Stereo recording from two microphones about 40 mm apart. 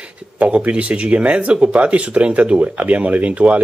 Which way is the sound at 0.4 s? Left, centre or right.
Right.